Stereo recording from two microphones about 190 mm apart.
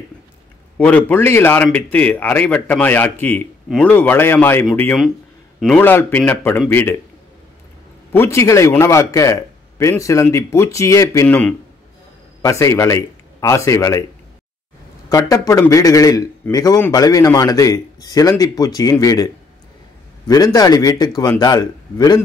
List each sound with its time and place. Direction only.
0.7 s a man's voice: 10° left (ahead or behind)
8.1 s a man's voice: 15° left (ahead or behind)
15.0 s a man's voice: 20° left (ahead or behind)